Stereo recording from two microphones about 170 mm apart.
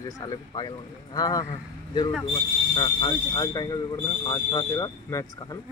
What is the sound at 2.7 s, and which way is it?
Speech, 25° left (ahead or behind).